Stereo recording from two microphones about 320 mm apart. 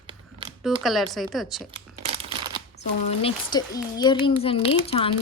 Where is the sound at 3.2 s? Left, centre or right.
Centre.